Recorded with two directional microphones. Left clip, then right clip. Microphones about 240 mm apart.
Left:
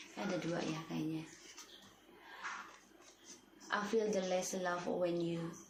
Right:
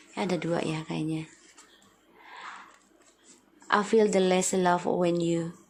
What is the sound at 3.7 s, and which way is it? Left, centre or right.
A woman's voice, right.